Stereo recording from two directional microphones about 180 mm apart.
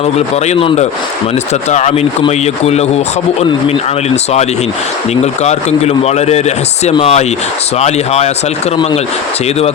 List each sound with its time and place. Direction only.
0.0 s speech: 35° left (ahead or behind)